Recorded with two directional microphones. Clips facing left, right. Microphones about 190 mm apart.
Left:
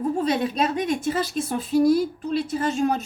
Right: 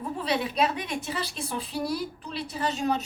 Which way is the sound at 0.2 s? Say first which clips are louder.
Right 1 dB; 45° left (ahead or behind).